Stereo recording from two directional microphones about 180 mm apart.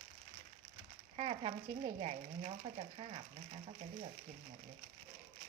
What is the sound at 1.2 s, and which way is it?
Speech, 35° right (ahead or behind).